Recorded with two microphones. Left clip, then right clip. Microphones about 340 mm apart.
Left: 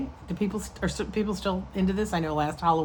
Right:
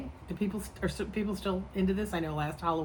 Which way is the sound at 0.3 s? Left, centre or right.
Left.